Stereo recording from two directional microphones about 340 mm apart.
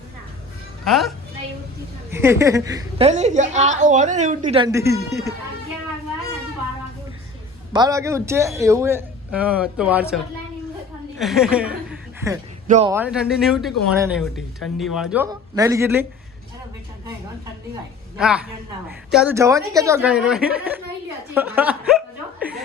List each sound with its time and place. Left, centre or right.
0.9 s a woman's voice: centre
7.7 s a woman's voice: centre
11.2 s speech: centre
11.9 s chuckle: centre
12.6 s speech: right
12.9 s a woman's voice: centre
18.2 s speech: centre
21.3 s chuckle: centre